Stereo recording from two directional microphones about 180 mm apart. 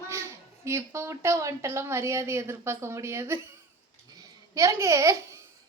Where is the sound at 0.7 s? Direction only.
15° right (ahead or behind).